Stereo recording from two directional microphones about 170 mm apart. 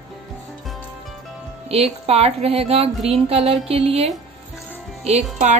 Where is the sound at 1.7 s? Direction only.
35° right (ahead or behind).